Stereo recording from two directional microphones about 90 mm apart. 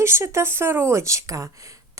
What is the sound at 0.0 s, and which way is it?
Speech, 30° right (ahead or behind).